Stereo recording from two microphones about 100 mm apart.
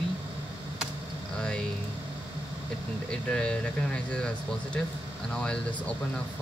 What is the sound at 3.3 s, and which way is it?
Speech, 10° left (ahead or behind).